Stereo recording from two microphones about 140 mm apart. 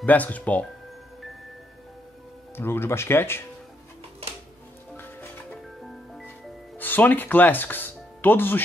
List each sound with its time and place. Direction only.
0.0 s speech: 10° left (ahead or behind)
2.5 s speech: 15° left (ahead or behind)
4.9 s music: 15° left (ahead or behind)
6.8 s speech: 15° left (ahead or behind)